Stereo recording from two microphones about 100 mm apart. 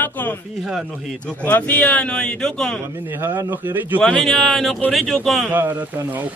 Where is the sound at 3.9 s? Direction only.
5° left (ahead or behind).